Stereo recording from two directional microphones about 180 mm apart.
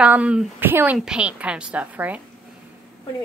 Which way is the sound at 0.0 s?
5° right (ahead or behind).